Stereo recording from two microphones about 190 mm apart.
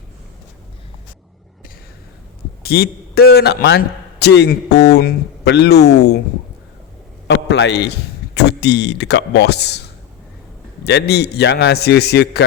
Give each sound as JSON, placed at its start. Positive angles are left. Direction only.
{"t": 2.6, "sound": "a man's voice", "side_deg": 55}
{"t": 7.3, "sound": "a man's voice", "side_deg": 65}
{"t": 10.8, "sound": "a man's voice", "side_deg": 60}